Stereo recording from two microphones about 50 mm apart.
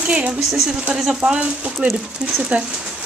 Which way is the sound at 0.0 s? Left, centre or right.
Right.